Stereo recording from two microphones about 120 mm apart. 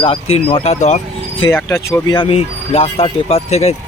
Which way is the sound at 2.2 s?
55° left (ahead or behind).